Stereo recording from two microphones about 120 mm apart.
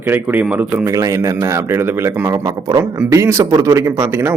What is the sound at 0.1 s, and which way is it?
Speech, 15° right (ahead or behind).